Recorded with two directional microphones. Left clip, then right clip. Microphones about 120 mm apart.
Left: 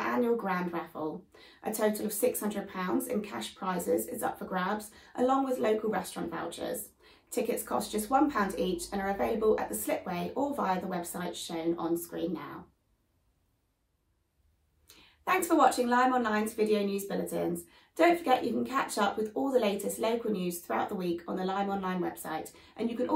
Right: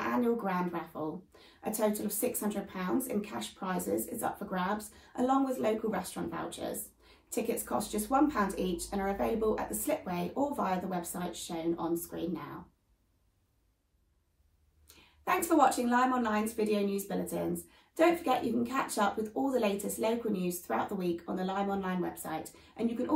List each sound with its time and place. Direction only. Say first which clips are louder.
0.0 s a sound: left 2 dB; 25° left (ahead or behind)
1.6 s speech: left 2 dB; 25° left (ahead or behind)
15.2 s speech: left 2 dB; 25° left (ahead or behind)